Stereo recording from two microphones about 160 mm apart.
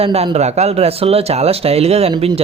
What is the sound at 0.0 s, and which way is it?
Speech, 40° right (ahead or behind).